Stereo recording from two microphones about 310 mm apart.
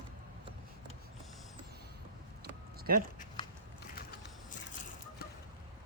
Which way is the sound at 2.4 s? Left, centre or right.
Right.